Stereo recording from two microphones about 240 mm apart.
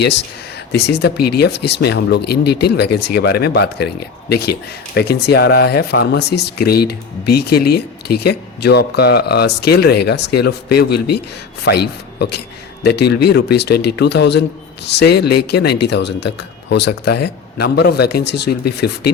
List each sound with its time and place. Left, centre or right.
0.7 s speech: left